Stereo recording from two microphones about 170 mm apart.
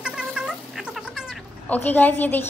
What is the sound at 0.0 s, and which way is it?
Cat, 5° right (ahead or behind).